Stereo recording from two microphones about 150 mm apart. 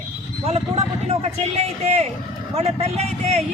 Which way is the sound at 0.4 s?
45° right (ahead or behind).